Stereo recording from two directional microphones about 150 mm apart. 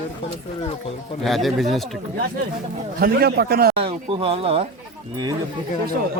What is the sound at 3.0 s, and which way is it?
Speech, 90° right.